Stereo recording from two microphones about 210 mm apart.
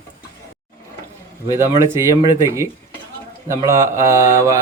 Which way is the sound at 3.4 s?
15° right (ahead or behind).